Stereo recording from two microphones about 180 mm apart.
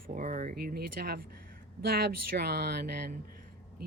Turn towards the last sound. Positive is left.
turn(degrees=-60)  # may be behind; listen again after turning